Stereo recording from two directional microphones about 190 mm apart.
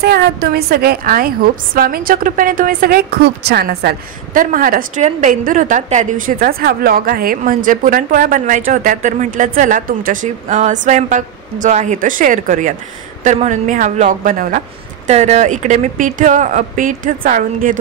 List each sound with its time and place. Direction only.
0.0 s a woman's voice: 55° right (ahead or behind)